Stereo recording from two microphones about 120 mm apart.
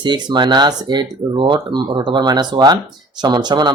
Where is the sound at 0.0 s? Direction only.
40° right (ahead or behind).